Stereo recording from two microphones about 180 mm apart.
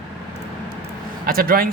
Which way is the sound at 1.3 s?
55° right (ahead or behind).